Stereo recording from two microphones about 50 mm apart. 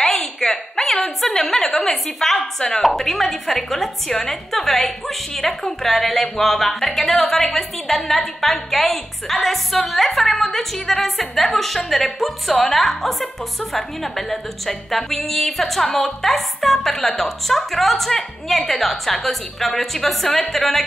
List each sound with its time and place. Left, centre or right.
0.0 s a woman's voice: centre